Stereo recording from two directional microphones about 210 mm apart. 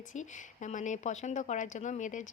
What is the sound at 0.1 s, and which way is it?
Speech, 35° left (ahead or behind).